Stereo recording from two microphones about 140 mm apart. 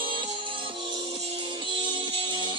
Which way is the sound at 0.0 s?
40° right (ahead or behind).